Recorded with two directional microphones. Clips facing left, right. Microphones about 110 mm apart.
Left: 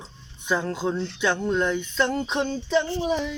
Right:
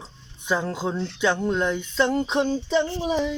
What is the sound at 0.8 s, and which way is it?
Music, 10° right (ahead or behind).